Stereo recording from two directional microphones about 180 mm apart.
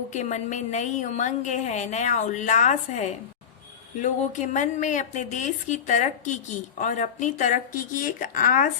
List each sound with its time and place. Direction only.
0.1 s a woman's voice: 40° left (ahead or behind)